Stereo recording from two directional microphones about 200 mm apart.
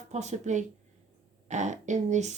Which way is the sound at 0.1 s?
35° right (ahead or behind).